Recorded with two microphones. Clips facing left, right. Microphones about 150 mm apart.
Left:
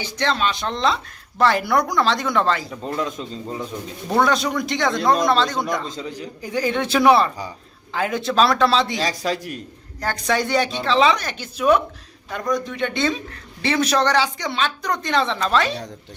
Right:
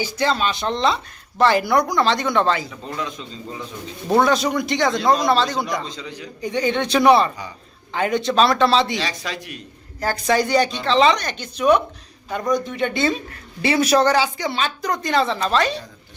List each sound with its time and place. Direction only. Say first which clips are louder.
0.0 s speech: right 1 dB; 5° right (ahead or behind)
2.8 s a man's voice: left 4 dB; 45° left (ahead or behind)
4.2 s speech: even; centre (ahead or behind)
5.9 s a man's voice: left 3 dB; 45° left (ahead or behind)
6.4 s speech: right 1 dB; 5° left (ahead or behind)
9.0 s speech: left 4 dB; 40° left (ahead or behind)
10.0 s speech: right 3 dB; centre (ahead or behind)